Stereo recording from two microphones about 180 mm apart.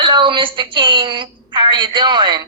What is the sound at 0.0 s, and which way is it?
Speech, 25° right (ahead or behind).